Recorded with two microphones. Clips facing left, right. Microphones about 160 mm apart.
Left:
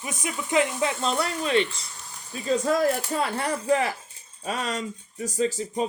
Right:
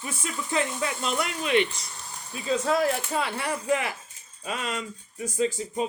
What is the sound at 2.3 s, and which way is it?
Speech, 45° left (ahead or behind).